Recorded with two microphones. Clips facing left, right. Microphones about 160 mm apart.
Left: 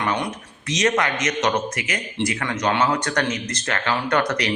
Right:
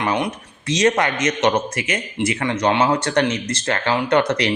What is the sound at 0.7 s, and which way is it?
A man's voice, 30° right (ahead or behind).